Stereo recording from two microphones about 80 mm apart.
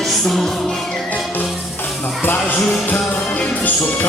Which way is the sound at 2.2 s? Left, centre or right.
Left.